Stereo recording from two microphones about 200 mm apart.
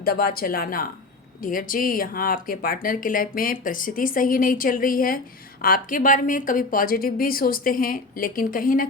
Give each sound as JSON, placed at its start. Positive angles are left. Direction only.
{"t": 0.0, "sound": "speech", "side_deg": 50}